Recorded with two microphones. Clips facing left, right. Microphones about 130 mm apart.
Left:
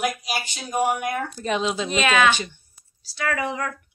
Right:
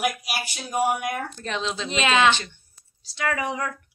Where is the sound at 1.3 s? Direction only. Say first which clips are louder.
Left 5 dB; 10° left (ahead or behind).